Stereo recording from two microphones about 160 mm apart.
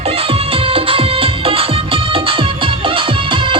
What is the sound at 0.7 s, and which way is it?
Music, 35° right (ahead or behind).